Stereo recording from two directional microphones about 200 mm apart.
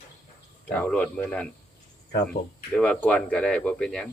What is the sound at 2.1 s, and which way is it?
Speech, 55° left (ahead or behind).